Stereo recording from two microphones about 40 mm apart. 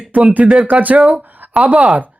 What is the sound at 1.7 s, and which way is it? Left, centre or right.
Speech, right.